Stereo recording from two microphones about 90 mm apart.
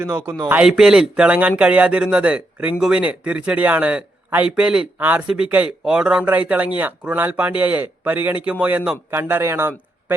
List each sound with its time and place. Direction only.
0.1 s a man's voice: 20° right (ahead or behind)
0.6 s a man's voice: 10° right (ahead or behind)
4.9 s a man's voice: 20° right (ahead or behind)
9.0 s speech: 25° right (ahead or behind)